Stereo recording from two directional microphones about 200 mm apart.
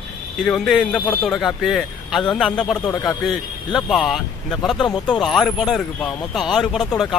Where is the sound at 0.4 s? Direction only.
Centre (ahead or behind).